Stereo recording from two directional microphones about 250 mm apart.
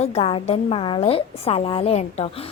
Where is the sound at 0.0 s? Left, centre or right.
Left.